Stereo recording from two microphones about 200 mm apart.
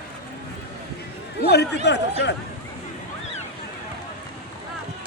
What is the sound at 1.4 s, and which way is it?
Speech, 55° left (ahead or behind).